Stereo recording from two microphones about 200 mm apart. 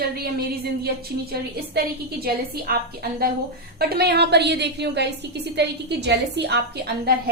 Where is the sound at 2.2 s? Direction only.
50° right (ahead or behind).